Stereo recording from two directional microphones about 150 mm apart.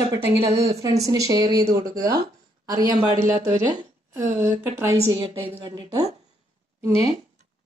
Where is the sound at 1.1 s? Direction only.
25° right (ahead or behind).